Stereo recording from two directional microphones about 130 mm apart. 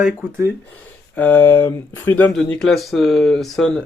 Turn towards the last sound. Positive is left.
turn(degrees=5)  # may be behind; listen again after turning